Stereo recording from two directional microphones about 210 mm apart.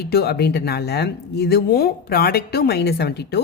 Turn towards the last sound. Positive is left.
turn(degrees=50)  # may be behind; listen again after turning